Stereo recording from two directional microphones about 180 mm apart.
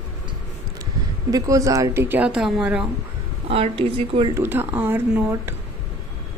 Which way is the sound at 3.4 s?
30° right (ahead or behind).